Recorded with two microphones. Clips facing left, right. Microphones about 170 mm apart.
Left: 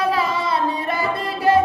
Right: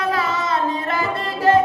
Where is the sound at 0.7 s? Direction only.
10° left (ahead or behind).